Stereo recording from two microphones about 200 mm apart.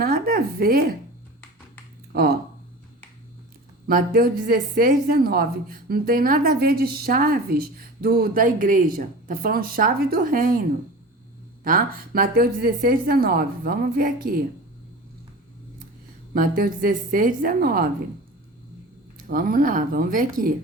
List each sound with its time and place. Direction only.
0.0 s a sound: 50° right (ahead or behind)
2.1 s a woman's voice: 50° right (ahead or behind)
3.8 s a woman's voice: 45° right (ahead or behind)
11.6 s a woman's voice: 45° right (ahead or behind)
16.3 s a woman's voice: 45° right (ahead or behind)
19.3 s a woman's voice: 45° right (ahead or behind)